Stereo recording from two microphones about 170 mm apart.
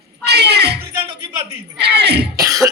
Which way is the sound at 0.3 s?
75° right (ahead or behind).